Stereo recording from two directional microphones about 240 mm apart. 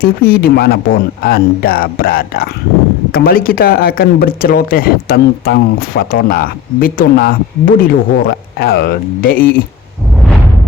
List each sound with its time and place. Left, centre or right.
0.0 s speech: left